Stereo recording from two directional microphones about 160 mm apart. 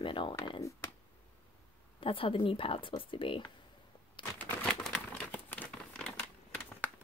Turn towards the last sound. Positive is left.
turn(degrees=5)  # may be behind; listen again after turning